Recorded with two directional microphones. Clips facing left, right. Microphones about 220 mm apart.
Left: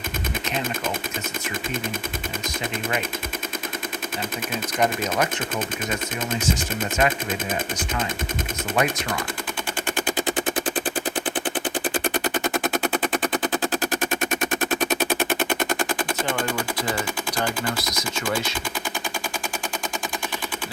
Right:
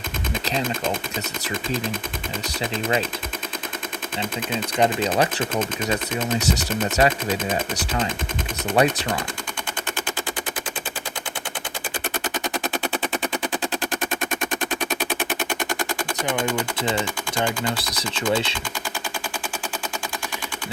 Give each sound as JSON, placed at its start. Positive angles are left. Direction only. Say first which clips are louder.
{"t": 4.8, "sound": "speech", "louder": "right 3 dB", "side_deg": -30}
{"t": 7.0, "sound": "speech", "louder": "right 3 dB", "side_deg": -30}
{"t": 8.7, "sound": "speech", "louder": "right 4 dB", "side_deg": -30}